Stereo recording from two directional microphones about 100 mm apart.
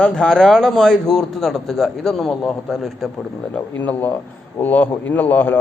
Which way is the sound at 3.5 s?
15° left (ahead or behind).